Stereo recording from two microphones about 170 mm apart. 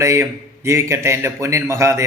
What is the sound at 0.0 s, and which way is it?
A man's voice, 15° right (ahead or behind).